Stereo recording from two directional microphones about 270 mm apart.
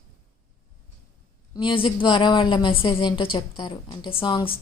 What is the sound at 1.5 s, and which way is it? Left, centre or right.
A woman's voice, centre.